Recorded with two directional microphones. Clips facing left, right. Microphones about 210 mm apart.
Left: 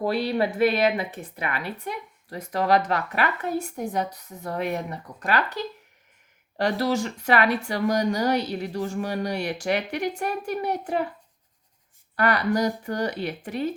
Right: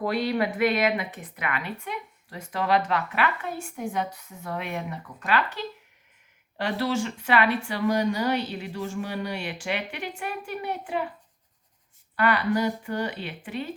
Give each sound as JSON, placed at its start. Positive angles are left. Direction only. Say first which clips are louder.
{"t": 0.0, "sound": "a woman's voice", "louder": "left 2 dB", "side_deg": 30}
{"t": 12.1, "sound": "a woman's voice", "louder": "left 1 dB", "side_deg": 40}